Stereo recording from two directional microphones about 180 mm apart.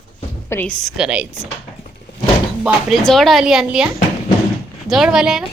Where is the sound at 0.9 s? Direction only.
5° right (ahead or behind).